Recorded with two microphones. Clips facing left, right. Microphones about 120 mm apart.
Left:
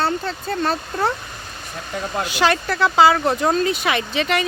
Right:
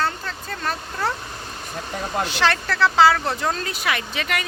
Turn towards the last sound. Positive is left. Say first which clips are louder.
# left 5 dB
turn(degrees=25)  # may be behind; listen again after turning